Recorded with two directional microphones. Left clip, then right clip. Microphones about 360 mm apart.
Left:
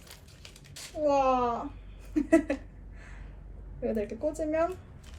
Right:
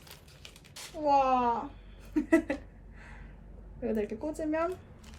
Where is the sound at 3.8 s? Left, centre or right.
Centre.